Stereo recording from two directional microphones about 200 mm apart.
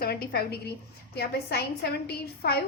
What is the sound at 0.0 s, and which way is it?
A woman's voice, 50° left (ahead or behind).